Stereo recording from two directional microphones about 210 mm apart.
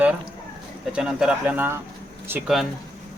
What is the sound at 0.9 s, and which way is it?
Speech, 5° right (ahead or behind).